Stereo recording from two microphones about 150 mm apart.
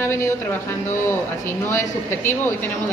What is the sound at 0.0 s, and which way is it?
A man's voice, 15° left (ahead or behind).